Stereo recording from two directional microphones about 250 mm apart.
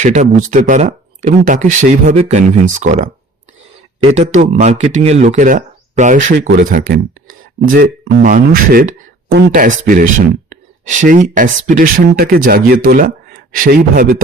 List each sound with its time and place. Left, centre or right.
0.0 s speech: right